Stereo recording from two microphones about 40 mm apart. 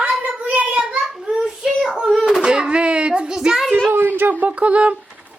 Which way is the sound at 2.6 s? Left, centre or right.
Right.